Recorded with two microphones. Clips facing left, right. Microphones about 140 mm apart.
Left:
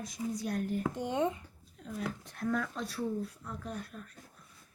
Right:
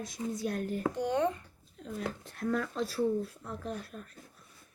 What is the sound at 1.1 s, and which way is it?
Speech, 15° left (ahead or behind).